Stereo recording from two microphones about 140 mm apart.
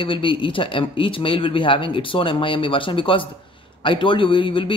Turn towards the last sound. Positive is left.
turn(degrees=35)  # may be behind; listen again after turning